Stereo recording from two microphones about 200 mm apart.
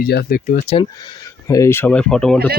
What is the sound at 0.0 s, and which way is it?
Speech, 50° left (ahead or behind).